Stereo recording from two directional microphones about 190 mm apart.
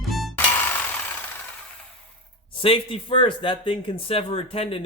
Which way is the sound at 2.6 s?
30° left (ahead or behind).